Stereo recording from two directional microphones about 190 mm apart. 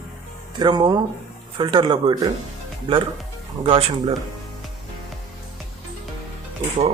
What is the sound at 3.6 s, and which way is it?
Speech, 30° right (ahead or behind).